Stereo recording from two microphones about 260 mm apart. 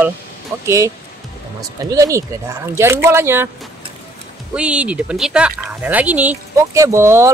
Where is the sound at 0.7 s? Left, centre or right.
Centre.